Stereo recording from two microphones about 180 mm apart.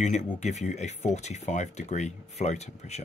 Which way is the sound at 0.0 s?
40° left (ahead or behind).